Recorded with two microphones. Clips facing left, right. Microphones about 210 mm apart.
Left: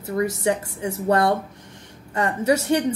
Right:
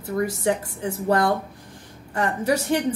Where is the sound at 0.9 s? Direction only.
30° left (ahead or behind).